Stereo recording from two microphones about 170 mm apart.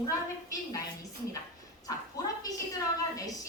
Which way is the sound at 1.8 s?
20° left (ahead or behind).